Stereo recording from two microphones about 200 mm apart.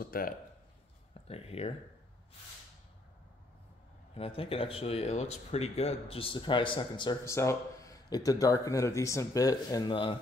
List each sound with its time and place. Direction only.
0.0 s speech: 45° left (ahead or behind)
1.2 s speech: 30° left (ahead or behind)
4.1 s speech: 30° left (ahead or behind)